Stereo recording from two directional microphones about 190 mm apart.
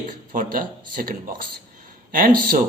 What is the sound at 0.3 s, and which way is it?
Speech, 45° right (ahead or behind).